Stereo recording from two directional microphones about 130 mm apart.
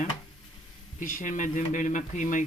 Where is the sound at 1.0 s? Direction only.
85° left.